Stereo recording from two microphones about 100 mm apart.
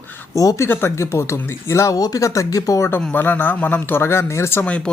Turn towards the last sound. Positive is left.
turn(degrees=10)  # may be behind; listen again after turning